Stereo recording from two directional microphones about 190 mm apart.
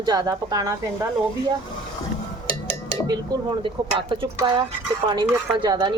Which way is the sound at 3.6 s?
25° right (ahead or behind).